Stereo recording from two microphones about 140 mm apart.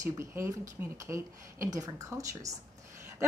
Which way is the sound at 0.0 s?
20° right (ahead or behind).